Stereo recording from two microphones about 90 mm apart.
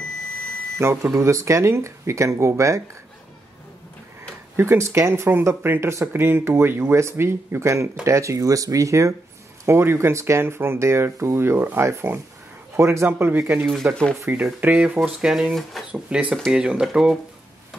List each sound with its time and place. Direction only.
0.8 s speech: 30° right (ahead or behind)
4.6 s speech: 30° right (ahead or behind)
15.0 s speech: 5° right (ahead or behind)
15.9 s speech: 10° right (ahead or behind)